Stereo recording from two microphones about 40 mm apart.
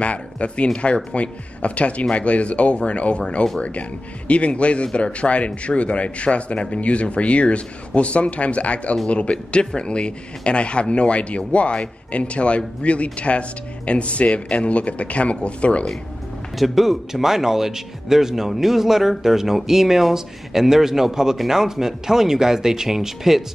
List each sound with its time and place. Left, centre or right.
0.0 s a man's voice: left
16.5 s speech: centre